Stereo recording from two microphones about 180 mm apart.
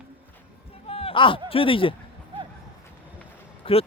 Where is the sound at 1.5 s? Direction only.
30° left (ahead or behind).